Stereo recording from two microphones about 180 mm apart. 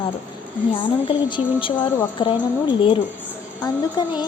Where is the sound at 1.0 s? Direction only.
30° left (ahead or behind).